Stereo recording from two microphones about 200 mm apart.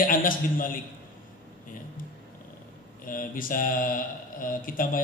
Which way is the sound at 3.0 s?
45° left (ahead or behind).